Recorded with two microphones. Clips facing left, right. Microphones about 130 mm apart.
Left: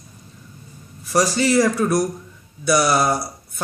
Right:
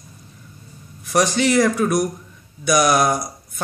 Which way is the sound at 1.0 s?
5° left (ahead or behind).